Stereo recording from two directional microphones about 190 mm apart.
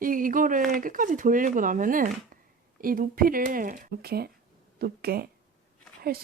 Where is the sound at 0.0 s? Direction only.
45° right (ahead or behind).